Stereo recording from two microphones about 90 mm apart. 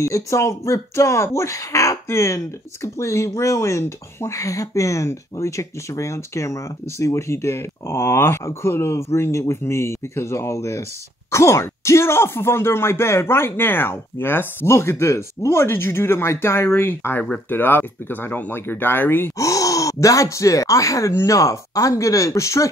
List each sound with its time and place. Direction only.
0.0 s speech: 35° left (ahead or behind)
19.4 s speech: 40° left (ahead or behind)